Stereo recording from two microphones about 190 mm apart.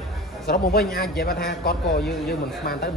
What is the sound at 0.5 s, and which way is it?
A man's voice, 55° left (ahead or behind).